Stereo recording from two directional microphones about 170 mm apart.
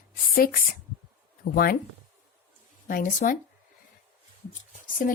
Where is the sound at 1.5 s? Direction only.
60° left (ahead or behind).